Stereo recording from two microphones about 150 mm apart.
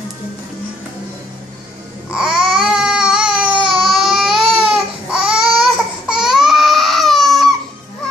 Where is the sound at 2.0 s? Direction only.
5° right (ahead or behind).